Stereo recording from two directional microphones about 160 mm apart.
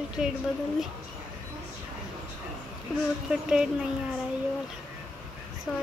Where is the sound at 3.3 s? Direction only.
5° right (ahead or behind).